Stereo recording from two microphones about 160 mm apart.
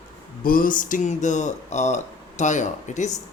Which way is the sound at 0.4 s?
60° left (ahead or behind).